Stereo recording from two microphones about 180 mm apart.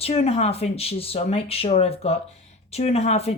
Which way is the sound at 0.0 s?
35° left (ahead or behind).